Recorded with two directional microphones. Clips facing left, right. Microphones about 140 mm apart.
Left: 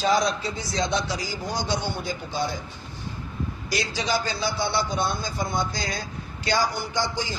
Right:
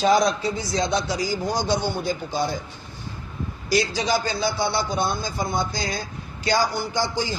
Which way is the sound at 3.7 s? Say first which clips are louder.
Right 5 dB; 35° right (ahead or behind).